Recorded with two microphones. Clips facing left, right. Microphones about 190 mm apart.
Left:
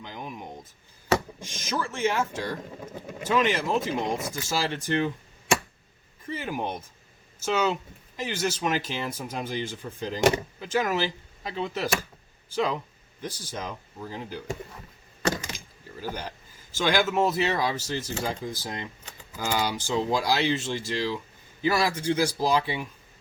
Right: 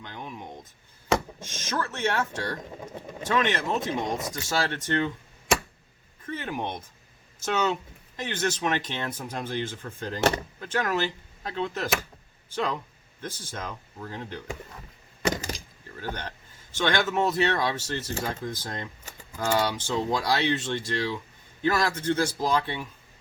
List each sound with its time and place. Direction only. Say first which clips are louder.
0.0 s a sound: left 1 dB; 10° left (ahead or behind)
1.5 s speech: even; 10° left (ahead or behind)
6.2 s speech: left 1 dB; 5° left (ahead or behind)
15.4 s door: right 3 dB; 35° right (ahead or behind)
16.0 s speech: left 1 dB; 10° left (ahead or behind)